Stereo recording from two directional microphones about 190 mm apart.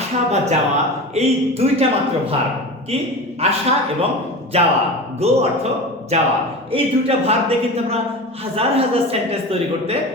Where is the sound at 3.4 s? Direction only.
35° right (ahead or behind).